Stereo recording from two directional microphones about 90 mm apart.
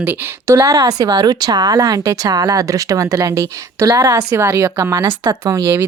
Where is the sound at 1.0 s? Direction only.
50° right (ahead or behind).